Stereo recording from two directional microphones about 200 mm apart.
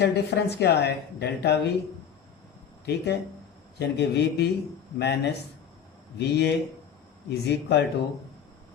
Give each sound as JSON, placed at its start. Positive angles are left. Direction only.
{"t": 0.0, "sound": "speech", "side_deg": 55}
{"t": 2.8, "sound": "speech", "side_deg": 55}